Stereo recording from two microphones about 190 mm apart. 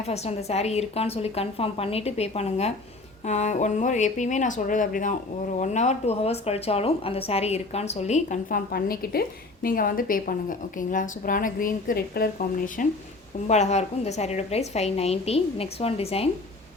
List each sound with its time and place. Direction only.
0.0 s a woman's voice: 35° left (ahead or behind)